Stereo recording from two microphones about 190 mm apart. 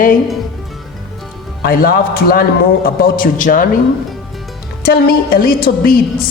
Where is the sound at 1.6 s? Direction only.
50° left (ahead or behind).